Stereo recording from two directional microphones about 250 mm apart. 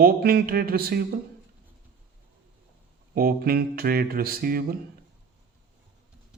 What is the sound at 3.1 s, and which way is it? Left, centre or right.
A man's voice, right.